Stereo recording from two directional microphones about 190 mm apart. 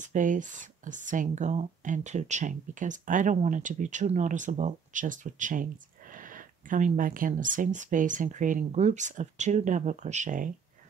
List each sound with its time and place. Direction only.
0.0 s speech: 40° right (ahead or behind)